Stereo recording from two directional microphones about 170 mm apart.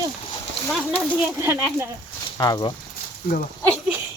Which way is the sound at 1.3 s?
15° right (ahead or behind).